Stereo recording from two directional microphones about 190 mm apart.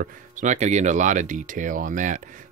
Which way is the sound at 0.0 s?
40° right (ahead or behind).